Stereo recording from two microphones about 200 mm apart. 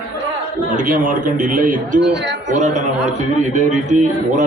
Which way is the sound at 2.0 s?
60° right (ahead or behind).